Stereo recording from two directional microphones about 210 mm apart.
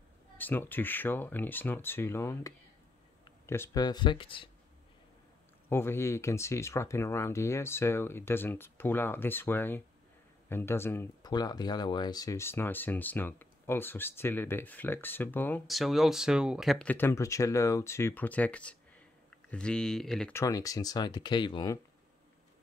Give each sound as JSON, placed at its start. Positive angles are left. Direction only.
{"t": 0.4, "sound": "speech", "side_deg": 10}
{"t": 5.7, "sound": "speech", "side_deg": 10}
{"t": 20.4, "sound": "speech", "side_deg": 15}